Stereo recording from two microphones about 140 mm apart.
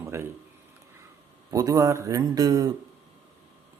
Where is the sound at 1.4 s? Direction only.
25° right (ahead or behind).